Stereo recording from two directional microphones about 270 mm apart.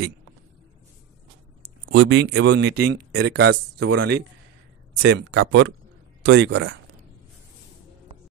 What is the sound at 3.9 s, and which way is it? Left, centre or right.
Speech, right.